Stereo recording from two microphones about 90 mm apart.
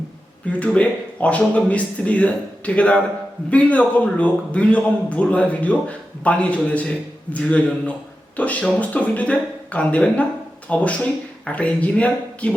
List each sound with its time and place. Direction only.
0.4 s a man's voice: 15° left (ahead or behind)